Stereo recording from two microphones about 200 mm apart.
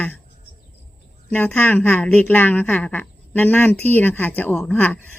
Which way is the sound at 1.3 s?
10° left (ahead or behind).